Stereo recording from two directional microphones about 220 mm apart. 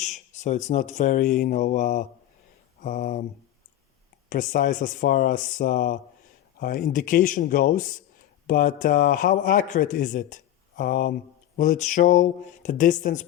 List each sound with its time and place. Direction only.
0.0 s speech: 30° left (ahead or behind)
4.3 s speech: 35° left (ahead or behind)